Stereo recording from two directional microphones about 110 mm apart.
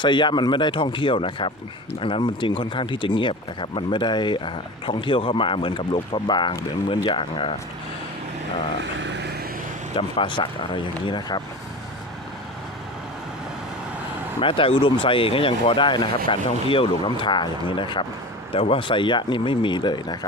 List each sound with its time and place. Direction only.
0.0 s speech: 45° left (ahead or behind)
9.9 s speech: 50° left (ahead or behind)
14.4 s speech: 55° left (ahead or behind)